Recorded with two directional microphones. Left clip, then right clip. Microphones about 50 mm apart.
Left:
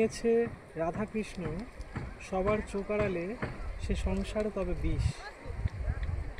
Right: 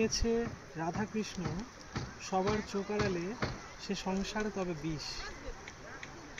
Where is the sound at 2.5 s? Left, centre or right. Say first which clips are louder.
Left 3 dB; right.